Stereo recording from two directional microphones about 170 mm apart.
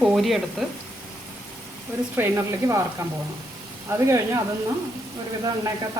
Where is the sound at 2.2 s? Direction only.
15° right (ahead or behind).